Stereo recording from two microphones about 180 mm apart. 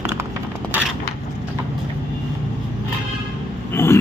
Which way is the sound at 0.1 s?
10° right (ahead or behind).